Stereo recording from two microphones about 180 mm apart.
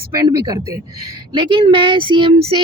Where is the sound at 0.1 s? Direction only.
20° right (ahead or behind).